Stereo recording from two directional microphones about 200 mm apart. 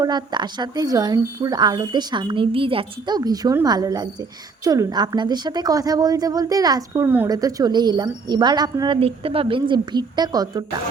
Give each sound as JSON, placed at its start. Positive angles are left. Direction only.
{"t": 0.0, "sound": "a woman's voice", "side_deg": -20}